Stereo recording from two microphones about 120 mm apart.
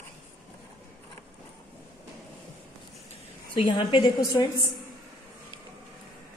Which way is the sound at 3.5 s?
40° left (ahead or behind).